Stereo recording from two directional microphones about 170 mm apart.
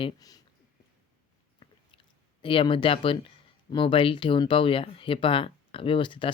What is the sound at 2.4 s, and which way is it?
Speech, 30° left (ahead or behind).